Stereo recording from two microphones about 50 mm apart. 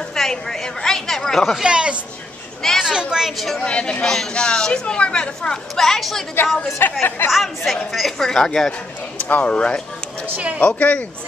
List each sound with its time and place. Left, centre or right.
0.1 s a woman's voice: centre
1.6 s a woman's voice: centre
3.3 s a woman's voice: centre
3.6 s speech: left
4.0 s a woman's voice: centre
5.8 s a woman's voice: centre
6.8 s speech: left
7.2 s a woman's voice: centre
8.3 s a woman's voice: centre
9.2 s speech: left